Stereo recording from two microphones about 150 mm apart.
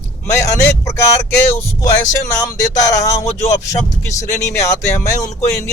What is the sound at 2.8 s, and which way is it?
Speech, 20° left (ahead or behind).